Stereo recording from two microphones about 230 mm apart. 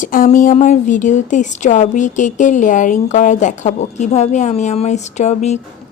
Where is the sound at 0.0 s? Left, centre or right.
Left.